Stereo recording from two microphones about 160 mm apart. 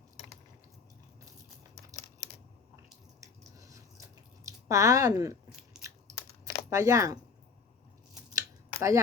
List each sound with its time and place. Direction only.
3.2 s a sound: 20° right (ahead or behind)
4.4 s speech: 20° right (ahead or behind)
5.8 s chewing: 20° right (ahead or behind)
8.3 s scissors: 20° right (ahead or behind)